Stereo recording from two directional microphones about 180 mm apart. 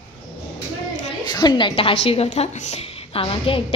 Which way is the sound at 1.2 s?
25° left (ahead or behind).